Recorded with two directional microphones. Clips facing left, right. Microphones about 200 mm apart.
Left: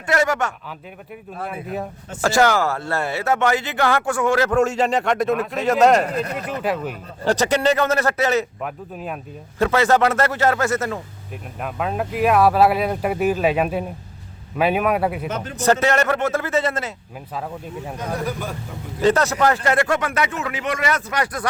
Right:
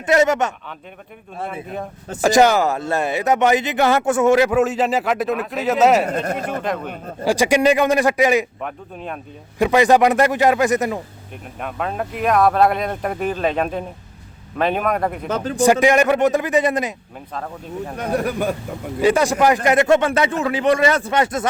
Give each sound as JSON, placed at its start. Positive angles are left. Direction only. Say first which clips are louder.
{"t": 0.0, "sound": "speech", "louder": "right 4 dB", "side_deg": -20}
{"t": 2.2, "sound": "speech", "louder": "right 3 dB", "side_deg": -15}
{"t": 4.5, "sound": "speech", "louder": "right 1 dB", "side_deg": 0}
{"t": 6.1, "sound": "speech", "louder": "right 2 dB", "side_deg": -50}
{"t": 6.6, "sound": "speech", "louder": "left 1 dB", "side_deg": 5}
{"t": 7.3, "sound": "a man's voice", "louder": "right 3 dB", "side_deg": -10}
{"t": 8.6, "sound": "speech", "louder": "even", "side_deg": 5}
{"t": 9.6, "sound": "a man's voice", "louder": "right 3 dB", "side_deg": -15}
{"t": 11.6, "sound": "a man's voice", "louder": "even", "side_deg": 0}
{"t": 15.5, "sound": "a man's voice", "louder": "right 4 dB", "side_deg": -15}
{"t": 17.3, "sound": "a man's voice", "louder": "right 1 dB", "side_deg": 5}
{"t": 17.9, "sound": "speech", "louder": "right 5 dB", "side_deg": -65}
{"t": 19.0, "sound": "a man's voice", "louder": "right 2 dB", "side_deg": -10}